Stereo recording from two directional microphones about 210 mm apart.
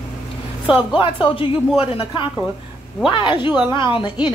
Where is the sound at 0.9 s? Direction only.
25° left (ahead or behind).